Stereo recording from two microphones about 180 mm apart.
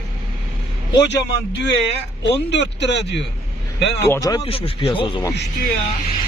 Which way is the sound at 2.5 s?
70° left (ahead or behind).